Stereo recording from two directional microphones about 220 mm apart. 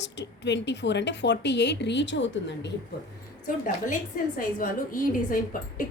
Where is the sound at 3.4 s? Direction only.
35° left (ahead or behind).